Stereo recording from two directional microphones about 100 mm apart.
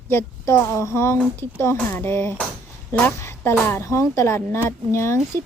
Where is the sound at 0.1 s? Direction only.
25° left (ahead or behind).